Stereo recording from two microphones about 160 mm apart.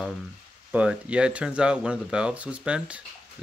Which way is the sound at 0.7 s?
5° right (ahead or behind).